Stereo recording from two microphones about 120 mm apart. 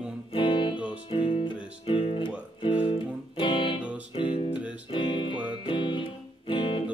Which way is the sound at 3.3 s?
45° left (ahead or behind).